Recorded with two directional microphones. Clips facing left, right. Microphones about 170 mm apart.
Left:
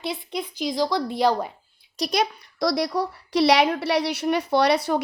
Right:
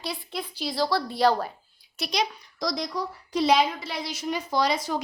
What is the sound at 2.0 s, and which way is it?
A child's voice, 50° left (ahead or behind).